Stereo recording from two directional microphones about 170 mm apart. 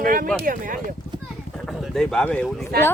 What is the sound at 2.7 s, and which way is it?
Speech, 65° right (ahead or behind).